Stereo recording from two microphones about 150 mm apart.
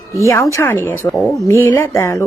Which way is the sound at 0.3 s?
20° left (ahead or behind).